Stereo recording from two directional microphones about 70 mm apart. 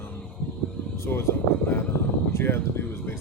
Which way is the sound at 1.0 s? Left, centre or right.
Left.